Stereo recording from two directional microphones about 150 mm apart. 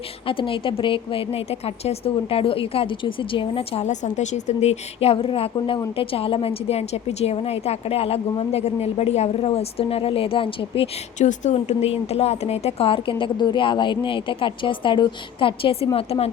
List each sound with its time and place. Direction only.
0.3 s a woman's voice: 35° left (ahead or behind)
11.2 s a woman's voice: 55° left (ahead or behind)